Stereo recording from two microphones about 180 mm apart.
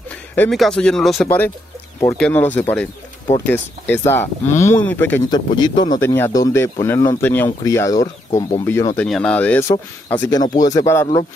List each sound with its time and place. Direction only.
0.4 s speech: centre (ahead or behind)
5.3 s speech: 25° left (ahead or behind)
5.9 s speech: 15° left (ahead or behind)